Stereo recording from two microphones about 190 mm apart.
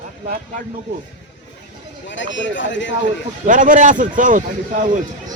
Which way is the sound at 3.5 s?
45° right (ahead or behind).